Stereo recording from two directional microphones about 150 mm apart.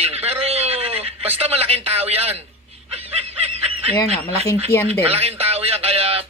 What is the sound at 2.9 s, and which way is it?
Snicker, 45° right (ahead or behind).